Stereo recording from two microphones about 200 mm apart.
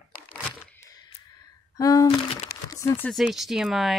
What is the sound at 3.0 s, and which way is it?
Speech, centre (ahead or behind).